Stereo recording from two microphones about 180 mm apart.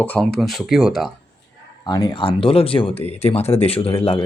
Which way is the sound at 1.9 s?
20° left (ahead or behind).